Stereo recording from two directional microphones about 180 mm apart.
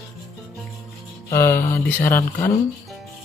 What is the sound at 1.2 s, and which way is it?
Speech, 15° left (ahead or behind).